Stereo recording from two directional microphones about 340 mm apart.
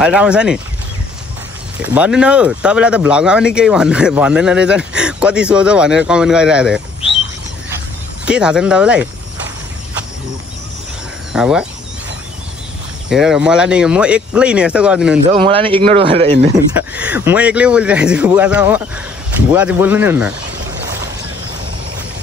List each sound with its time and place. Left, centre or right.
0.0 s speech: centre
1.8 s speech: centre
8.3 s speech: centre
11.3 s speech: centre
13.1 s speech: centre
15.3 s speech: centre
16.7 s speech: centre